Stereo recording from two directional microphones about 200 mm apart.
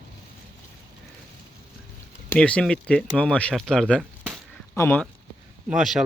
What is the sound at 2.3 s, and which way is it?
Speech, 5° left (ahead or behind).